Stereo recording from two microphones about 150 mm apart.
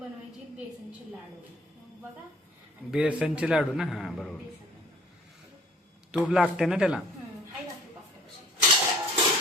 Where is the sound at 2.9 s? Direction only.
5° right (ahead or behind).